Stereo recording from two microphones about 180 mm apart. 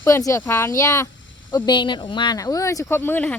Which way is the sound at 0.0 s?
15° left (ahead or behind).